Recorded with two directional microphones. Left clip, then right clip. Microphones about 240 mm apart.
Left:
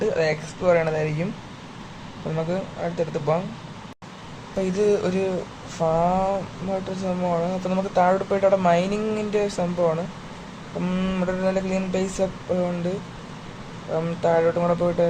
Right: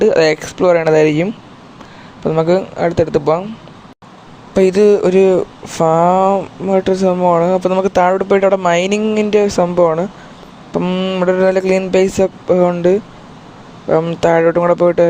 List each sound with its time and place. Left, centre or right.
0.0 s mantra: right
2.3 s mantra: right
4.6 s mantra: right
13.9 s mantra: right